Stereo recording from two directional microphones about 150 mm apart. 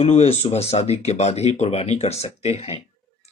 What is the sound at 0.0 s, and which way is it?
Speech, 45° left (ahead or behind).